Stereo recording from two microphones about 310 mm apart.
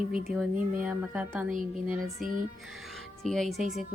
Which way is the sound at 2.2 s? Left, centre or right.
Right.